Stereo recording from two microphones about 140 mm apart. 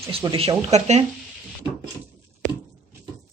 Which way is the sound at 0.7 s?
50° right (ahead or behind).